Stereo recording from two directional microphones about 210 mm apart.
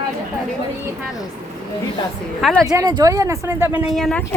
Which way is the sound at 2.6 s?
20° right (ahead or behind).